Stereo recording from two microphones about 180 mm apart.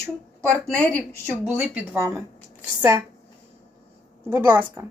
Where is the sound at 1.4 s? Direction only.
10° right (ahead or behind).